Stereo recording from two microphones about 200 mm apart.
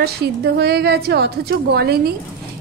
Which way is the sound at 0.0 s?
55° right (ahead or behind).